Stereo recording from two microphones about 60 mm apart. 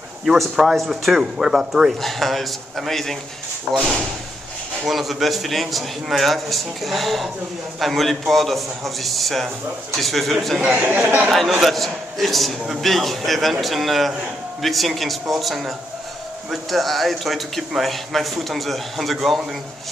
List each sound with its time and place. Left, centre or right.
0.2 s speech: centre
4.8 s speech: centre
10.8 s speech: right
11.6 s speech: centre